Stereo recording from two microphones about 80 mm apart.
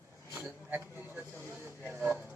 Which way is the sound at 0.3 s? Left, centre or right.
Right.